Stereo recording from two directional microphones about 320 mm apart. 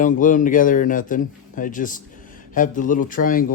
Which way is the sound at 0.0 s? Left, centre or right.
Left.